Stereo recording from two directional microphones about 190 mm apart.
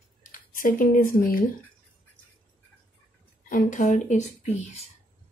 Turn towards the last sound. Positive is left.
turn(degrees=35)  # may be behind; listen again after turning